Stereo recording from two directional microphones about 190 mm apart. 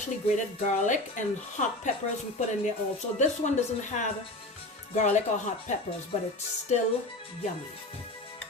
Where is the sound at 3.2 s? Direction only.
40° left (ahead or behind).